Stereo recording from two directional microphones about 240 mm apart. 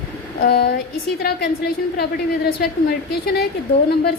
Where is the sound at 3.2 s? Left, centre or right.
Left.